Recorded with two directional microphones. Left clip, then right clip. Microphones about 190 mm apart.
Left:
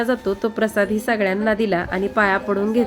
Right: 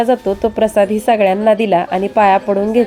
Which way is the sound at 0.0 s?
10° right (ahead or behind).